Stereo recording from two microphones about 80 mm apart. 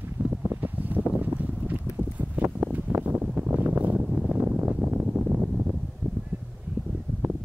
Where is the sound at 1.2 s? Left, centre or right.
Right.